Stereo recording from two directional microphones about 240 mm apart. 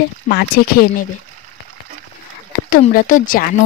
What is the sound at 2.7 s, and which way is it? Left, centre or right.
Speech, left.